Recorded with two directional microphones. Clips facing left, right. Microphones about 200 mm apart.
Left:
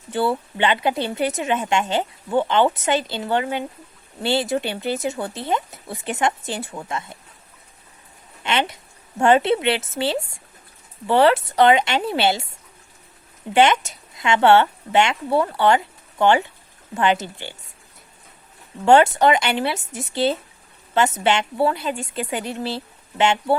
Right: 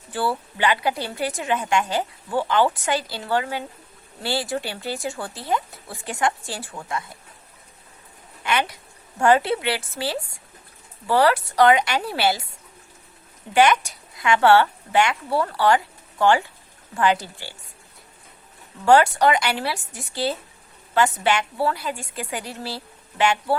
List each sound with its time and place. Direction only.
0.1 s a woman's voice: 20° left (ahead or behind)
8.4 s a woman's voice: 25° left (ahead or behind)
13.5 s a woman's voice: 25° left (ahead or behind)
18.9 s a woman's voice: 25° left (ahead or behind)